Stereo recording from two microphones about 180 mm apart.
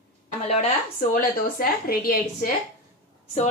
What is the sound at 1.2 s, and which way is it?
A woman's voice, 50° left (ahead or behind).